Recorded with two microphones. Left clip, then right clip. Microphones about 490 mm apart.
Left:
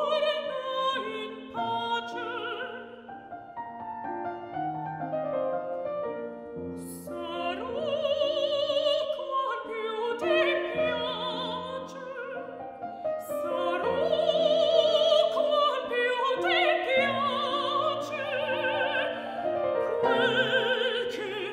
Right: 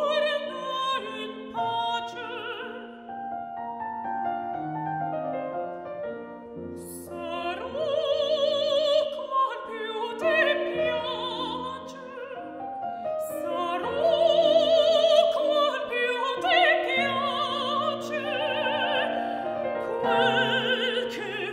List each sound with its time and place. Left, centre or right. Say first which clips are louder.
0.0 s opera: right 2 dB; centre
1.6 s music: right 2 dB; centre
7.3 s opera: right 2 dB; centre
13.4 s opera: left 3 dB; centre
20.2 s music: right 2 dB; centre